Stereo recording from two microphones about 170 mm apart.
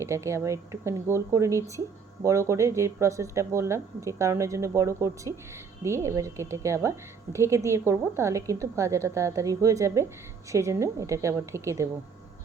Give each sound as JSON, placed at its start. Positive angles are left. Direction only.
{"t": 0.0, "sound": "speech", "side_deg": -15}